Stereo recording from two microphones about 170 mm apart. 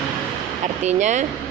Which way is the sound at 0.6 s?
45° right (ahead or behind).